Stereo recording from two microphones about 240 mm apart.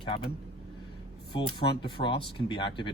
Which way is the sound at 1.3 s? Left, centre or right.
Centre.